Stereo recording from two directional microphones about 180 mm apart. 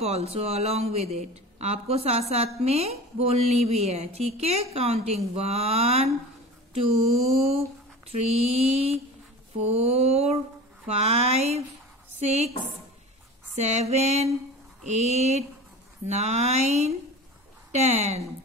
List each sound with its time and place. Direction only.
0.0 s speech: 35° right (ahead or behind)
13.6 s speech: 40° right (ahead or behind)